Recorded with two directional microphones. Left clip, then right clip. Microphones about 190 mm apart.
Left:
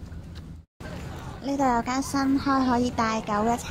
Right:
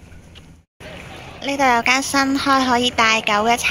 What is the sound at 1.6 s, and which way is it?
Speech, 5° left (ahead or behind).